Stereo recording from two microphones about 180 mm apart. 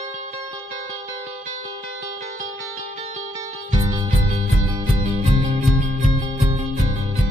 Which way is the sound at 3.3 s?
20° right (ahead or behind).